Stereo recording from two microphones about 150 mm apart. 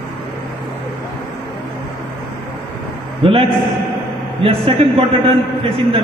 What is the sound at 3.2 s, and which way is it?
A woman's voice, 40° right (ahead or behind).